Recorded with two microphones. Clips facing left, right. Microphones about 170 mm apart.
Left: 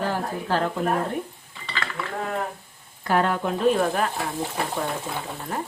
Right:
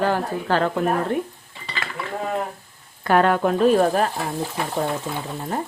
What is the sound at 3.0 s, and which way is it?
Speech, 65° right (ahead or behind).